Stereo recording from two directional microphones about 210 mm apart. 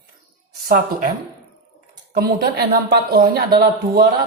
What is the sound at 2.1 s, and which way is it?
Speech, 45° right (ahead or behind).